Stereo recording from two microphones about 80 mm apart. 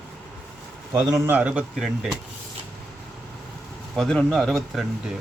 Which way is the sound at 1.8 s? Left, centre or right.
Centre.